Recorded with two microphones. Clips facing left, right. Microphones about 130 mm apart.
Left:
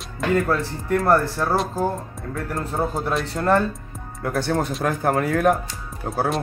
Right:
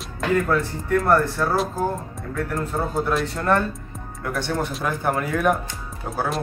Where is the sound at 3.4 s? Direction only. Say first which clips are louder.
Left 2 dB; 35° left (ahead or behind).